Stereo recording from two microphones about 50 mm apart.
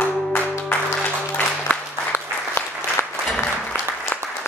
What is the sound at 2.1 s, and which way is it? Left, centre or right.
Applause, left.